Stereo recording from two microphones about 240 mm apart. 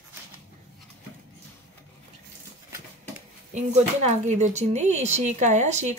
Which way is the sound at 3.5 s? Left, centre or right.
Right.